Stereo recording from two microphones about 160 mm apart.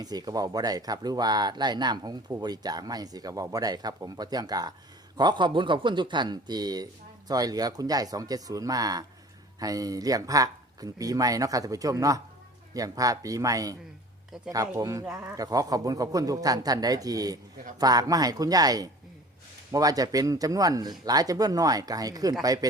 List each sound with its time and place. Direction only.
0.0 s speech: 25° right (ahead or behind)
15.0 s speech: 5° right (ahead or behind)
15.4 s speech: 25° right (ahead or behind)